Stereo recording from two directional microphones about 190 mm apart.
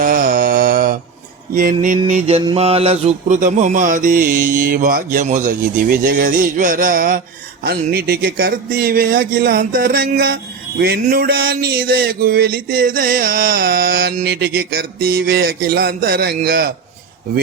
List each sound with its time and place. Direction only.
0.0 s mantra: 45° right (ahead or behind)
2.0 s speech: 35° right (ahead or behind); by 16.7 s 50° right (ahead or behind)